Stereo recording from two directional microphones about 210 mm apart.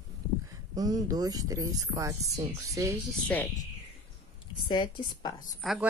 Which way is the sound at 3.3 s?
10° left (ahead or behind).